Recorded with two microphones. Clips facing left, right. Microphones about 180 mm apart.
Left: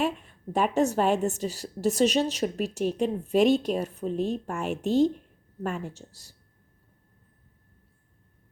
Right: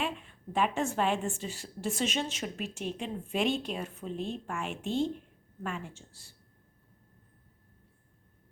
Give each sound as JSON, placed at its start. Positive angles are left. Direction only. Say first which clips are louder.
{"t": 0.0, "sound": "a woman's voice", "louder": "left 7 dB", "side_deg": 40}